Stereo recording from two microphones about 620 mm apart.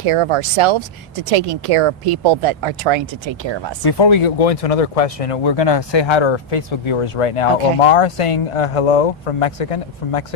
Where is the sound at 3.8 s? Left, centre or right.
Left.